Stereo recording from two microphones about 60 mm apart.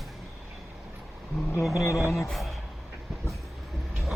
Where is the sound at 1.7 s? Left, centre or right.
Left.